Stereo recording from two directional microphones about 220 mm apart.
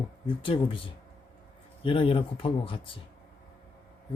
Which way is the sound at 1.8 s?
25° left (ahead or behind).